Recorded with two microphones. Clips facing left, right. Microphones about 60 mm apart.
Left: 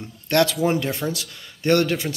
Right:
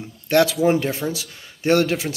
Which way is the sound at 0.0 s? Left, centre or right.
Centre.